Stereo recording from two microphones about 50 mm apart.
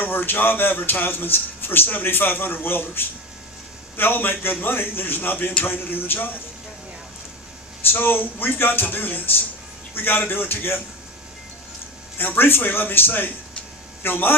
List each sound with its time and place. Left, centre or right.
0.0 s speech: left
7.9 s speech: left
12.1 s speech: left